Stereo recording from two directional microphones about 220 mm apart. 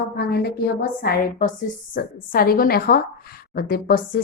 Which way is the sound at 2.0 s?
40° left (ahead or behind).